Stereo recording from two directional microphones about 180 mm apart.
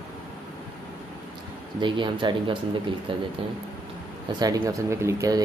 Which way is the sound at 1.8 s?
25° right (ahead or behind).